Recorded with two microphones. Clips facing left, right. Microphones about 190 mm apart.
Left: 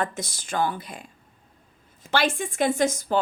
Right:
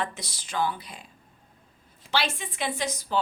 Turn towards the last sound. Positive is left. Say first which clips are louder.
# left 6 dB
turn(degrees=50)  # may be behind; listen again after turning